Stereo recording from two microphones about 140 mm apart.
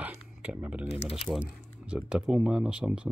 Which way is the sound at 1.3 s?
5° right (ahead or behind).